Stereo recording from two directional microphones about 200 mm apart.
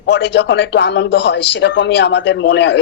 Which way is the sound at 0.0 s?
60° left (ahead or behind).